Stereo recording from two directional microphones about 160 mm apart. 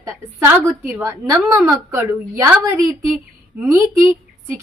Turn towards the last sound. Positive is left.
turn(degrees=-15)  # may be behind; listen again after turning